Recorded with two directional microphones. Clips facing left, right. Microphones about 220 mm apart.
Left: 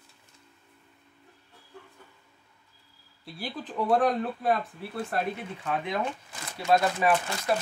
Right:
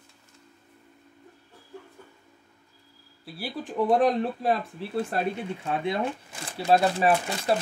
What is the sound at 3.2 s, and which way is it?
Speech, 5° right (ahead or behind).